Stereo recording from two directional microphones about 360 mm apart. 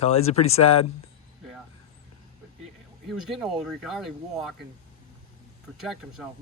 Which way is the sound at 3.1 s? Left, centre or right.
Centre.